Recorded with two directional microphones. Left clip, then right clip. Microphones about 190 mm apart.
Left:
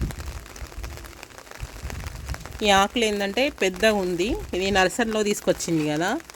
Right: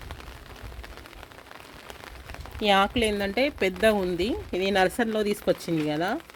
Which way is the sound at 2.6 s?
5° left (ahead or behind).